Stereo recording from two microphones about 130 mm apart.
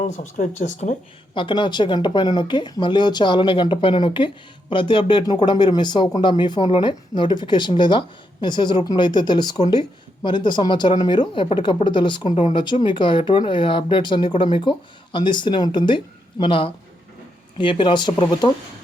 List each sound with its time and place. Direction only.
0.0 s speech: 70° left (ahead or behind)
1.3 s speech: 40° left (ahead or behind)